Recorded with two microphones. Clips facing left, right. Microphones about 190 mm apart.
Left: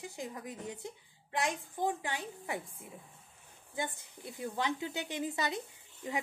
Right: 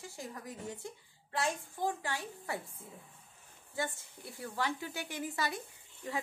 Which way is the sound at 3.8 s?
20° left (ahead or behind).